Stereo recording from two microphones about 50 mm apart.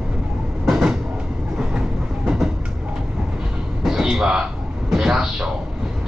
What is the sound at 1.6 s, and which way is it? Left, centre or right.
Train, centre.